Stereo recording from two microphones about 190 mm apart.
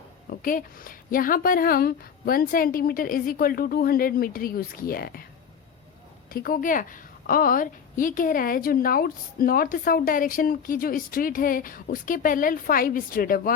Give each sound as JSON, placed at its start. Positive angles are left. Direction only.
{"t": 0.3, "sound": "a woman's voice", "side_deg": 45}
{"t": 6.3, "sound": "a woman's voice", "side_deg": 50}